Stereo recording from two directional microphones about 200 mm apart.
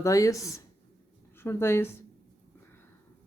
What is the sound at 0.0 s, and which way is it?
Speech, 15° left (ahead or behind).